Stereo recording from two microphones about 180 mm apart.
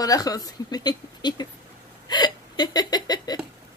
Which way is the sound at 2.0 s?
25° left (ahead or behind).